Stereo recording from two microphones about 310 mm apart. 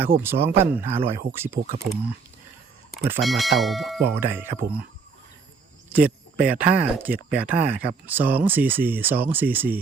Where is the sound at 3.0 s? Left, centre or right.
Centre.